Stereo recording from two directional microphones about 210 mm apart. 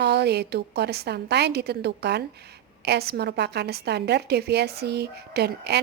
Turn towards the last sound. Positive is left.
turn(degrees=-50)  # may be behind; listen again after turning